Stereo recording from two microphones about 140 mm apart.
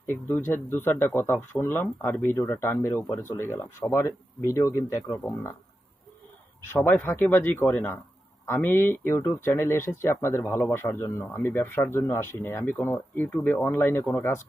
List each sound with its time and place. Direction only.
0.0 s speech: 15° left (ahead or behind)
6.7 s speech: 15° left (ahead or behind)